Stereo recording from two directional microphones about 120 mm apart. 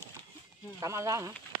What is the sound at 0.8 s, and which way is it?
Speech, 25° right (ahead or behind).